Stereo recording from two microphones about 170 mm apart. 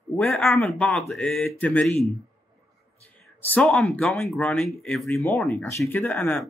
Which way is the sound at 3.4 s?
10° left (ahead or behind).